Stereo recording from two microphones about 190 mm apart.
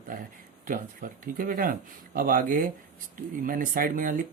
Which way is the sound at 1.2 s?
45° right (ahead or behind).